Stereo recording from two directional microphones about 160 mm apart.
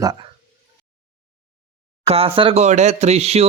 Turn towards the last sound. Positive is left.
turn(degrees=-40)  # may be behind; listen again after turning